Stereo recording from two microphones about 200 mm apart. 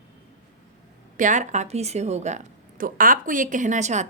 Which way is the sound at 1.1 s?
40° right (ahead or behind).